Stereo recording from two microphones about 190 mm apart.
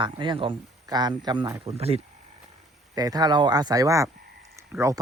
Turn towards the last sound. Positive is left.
turn(degrees=-15)  # may be behind; listen again after turning